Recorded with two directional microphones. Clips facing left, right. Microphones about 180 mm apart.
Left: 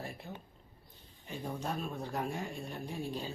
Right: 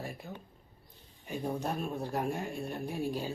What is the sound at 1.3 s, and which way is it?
Speech, 15° right (ahead or behind).